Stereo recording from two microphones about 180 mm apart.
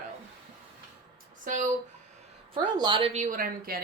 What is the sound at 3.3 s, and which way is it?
Speech, 55° right (ahead or behind).